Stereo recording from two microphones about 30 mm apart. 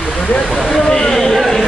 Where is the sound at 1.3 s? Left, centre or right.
Centre.